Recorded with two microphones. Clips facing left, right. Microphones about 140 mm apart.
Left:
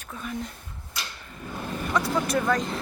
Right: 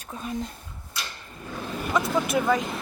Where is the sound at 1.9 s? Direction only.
5° right (ahead or behind).